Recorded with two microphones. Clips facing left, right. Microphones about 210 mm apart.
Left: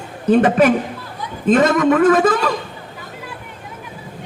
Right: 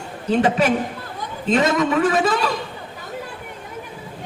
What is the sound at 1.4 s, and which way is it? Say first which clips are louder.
Speech: left 5 dB; 50° left (ahead or behind).